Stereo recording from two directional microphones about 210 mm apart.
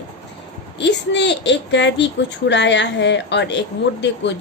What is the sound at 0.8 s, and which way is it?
A woman's voice, 55° left (ahead or behind).